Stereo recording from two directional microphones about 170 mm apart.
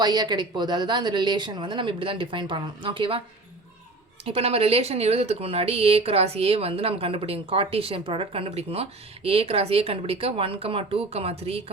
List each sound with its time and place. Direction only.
0.0 s speech: 25° right (ahead or behind)
4.3 s speech: 35° right (ahead or behind)